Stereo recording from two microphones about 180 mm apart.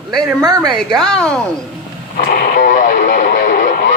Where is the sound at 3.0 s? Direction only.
45° left (ahead or behind).